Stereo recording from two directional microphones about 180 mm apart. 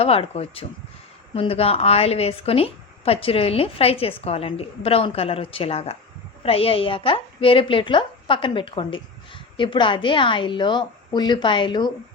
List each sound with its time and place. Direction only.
0.0 s a woman's voice: 30° left (ahead or behind)